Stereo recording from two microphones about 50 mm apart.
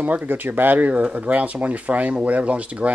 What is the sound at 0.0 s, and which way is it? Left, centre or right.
Speech, right.